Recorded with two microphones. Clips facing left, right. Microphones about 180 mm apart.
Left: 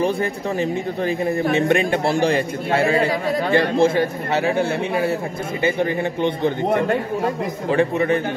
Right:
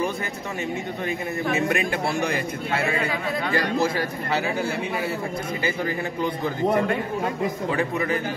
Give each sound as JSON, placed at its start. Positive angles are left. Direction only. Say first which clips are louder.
{"t": 1.0, "sound": "a man's voice", "louder": "left 7 dB", "side_deg": 30}
{"t": 5.6, "sound": "a man's voice", "louder": "left 8 dB", "side_deg": 25}
{"t": 7.7, "sound": "a man's voice", "louder": "left 11 dB", "side_deg": 30}